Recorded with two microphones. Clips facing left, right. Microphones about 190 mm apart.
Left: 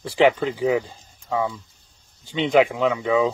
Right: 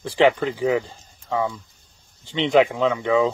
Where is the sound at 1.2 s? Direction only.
5° left (ahead or behind).